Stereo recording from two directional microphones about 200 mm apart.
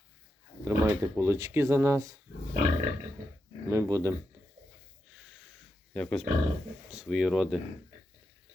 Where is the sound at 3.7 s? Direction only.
15° right (ahead or behind).